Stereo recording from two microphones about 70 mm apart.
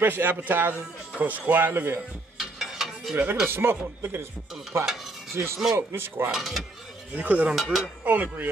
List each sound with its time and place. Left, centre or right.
0.0 s a man's voice: right
2.3 s a sound: centre
3.4 s speech: right
4.7 s dishes: right
5.3 s speech: right
6.3 s speech: centre
7.2 s a man's voice: right
7.5 s speech: centre
8.0 s a man's voice: right